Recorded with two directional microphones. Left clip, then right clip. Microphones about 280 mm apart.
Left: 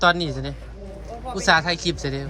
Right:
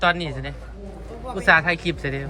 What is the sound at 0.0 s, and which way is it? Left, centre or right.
Speech, centre.